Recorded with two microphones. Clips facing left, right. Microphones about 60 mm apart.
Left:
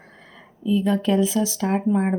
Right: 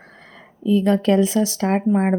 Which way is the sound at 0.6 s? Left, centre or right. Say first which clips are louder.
Right 4 dB; right.